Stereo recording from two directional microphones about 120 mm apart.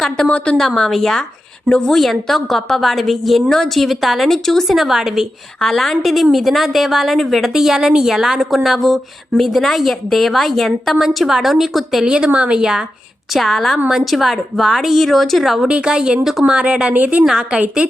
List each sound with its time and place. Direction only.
0.0 s a woman's voice: 5° left (ahead or behind); by 17.8 s 10° right (ahead or behind)